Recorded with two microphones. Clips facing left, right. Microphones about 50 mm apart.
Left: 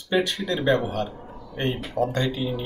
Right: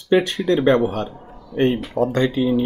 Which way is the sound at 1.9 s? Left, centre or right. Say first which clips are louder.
Right 6 dB; right.